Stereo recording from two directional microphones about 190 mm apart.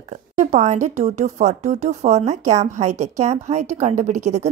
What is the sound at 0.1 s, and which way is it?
Speech, 40° right (ahead or behind).